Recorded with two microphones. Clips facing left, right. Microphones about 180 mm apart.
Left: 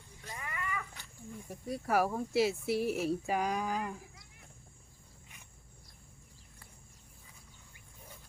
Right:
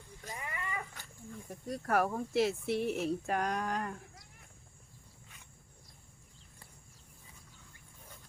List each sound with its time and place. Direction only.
0.3 s cat: 25° right (ahead or behind)
1.3 s speech: 5° left (ahead or behind)